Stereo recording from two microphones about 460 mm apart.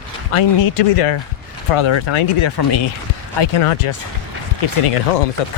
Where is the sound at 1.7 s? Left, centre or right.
Left.